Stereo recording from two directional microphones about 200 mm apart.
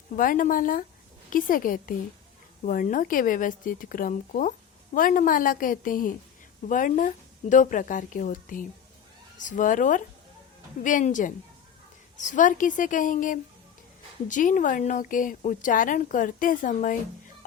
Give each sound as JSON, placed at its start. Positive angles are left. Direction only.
{"t": 0.2, "sound": "a woman's voice", "side_deg": 40}